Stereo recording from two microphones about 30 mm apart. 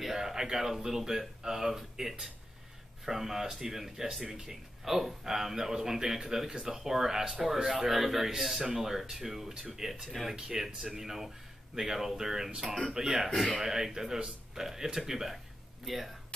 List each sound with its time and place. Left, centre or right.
0.0 s speech: centre
9.5 s speech: right; by 16.2 s centre